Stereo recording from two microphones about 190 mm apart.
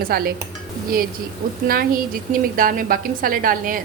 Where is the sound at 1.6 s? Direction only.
50° right (ahead or behind).